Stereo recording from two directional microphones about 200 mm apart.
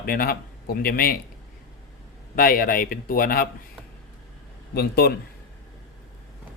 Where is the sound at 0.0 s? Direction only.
50° left (ahead or behind).